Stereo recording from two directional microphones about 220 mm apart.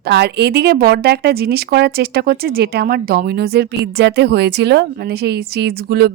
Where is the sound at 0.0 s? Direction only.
50° right (ahead or behind).